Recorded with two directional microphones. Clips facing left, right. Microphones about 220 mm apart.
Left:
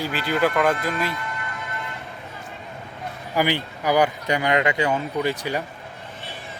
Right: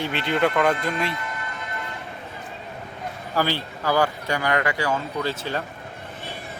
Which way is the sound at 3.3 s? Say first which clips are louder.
Left 2 dB; 15° left (ahead or behind).